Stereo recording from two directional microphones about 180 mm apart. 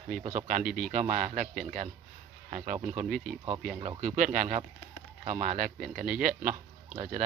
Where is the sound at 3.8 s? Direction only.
40° right (ahead or behind).